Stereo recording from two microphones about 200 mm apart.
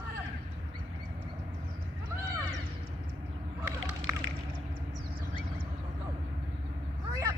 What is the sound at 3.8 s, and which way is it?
Water, 80° right.